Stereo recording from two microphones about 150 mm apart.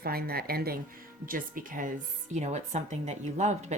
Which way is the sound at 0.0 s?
90° right.